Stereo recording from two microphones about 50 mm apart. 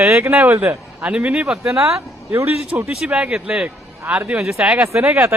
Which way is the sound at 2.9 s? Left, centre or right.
Centre.